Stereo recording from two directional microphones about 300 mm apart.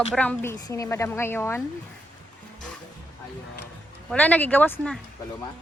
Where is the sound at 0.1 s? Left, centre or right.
Centre.